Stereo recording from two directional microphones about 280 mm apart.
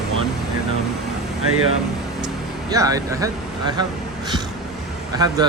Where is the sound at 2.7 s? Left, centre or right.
Centre.